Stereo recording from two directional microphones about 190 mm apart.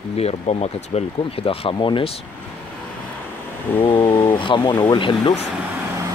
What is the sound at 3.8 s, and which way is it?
Speech, 25° left (ahead or behind).